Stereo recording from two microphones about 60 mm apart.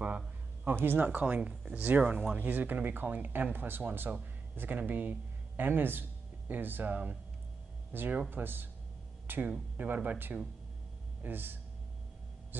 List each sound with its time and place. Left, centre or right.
0.7 s speech: right; by 1.8 s centre
1.8 s speech: right